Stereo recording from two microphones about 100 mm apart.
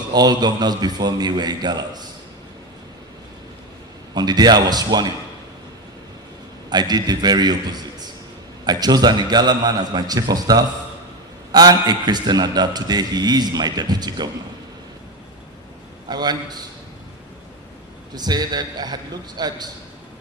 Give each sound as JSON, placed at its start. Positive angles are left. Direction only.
{"t": 0.1, "sound": "a man's voice", "side_deg": -45}
{"t": 4.1, "sound": "a man's voice", "side_deg": -45}
{"t": 6.7, "sound": "a man's voice", "side_deg": -45}
{"t": 16.0, "sound": "a man's voice", "side_deg": -45}
{"t": 18.1, "sound": "a man's voice", "side_deg": -45}